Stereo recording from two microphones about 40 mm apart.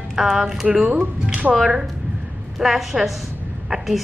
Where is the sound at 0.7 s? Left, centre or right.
Right.